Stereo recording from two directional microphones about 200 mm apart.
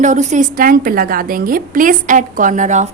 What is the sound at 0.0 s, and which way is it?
A woman's voice, 35° right (ahead or behind).